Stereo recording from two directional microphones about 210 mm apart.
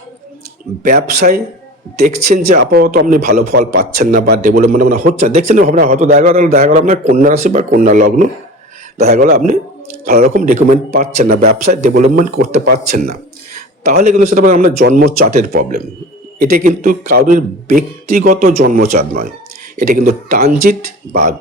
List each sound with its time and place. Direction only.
0.9 s a man's voice: 45° right (ahead or behind)
2.6 s a man's voice: 50° right (ahead or behind); by 5.6 s 35° right (ahead or behind)
5.6 s a man's voice: 45° right (ahead or behind)
13.8 s a man's voice: 45° right (ahead or behind)